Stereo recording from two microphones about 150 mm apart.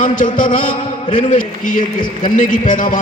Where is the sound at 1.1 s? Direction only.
60° left (ahead or behind).